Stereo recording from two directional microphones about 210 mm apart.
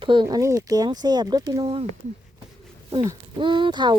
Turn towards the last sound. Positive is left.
turn(degrees=-20)  # may be behind; listen again after turning